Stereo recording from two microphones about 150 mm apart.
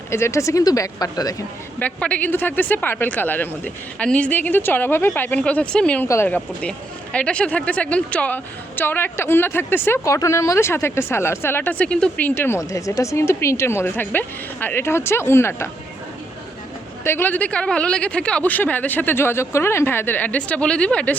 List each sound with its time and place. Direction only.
0.1 s speech: 20° left (ahead or behind)
1.8 s speech: 10° left (ahead or behind)
17.0 s speech: 15° left (ahead or behind)